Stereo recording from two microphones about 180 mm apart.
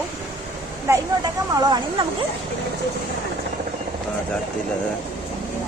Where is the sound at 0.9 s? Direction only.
15° right (ahead or behind).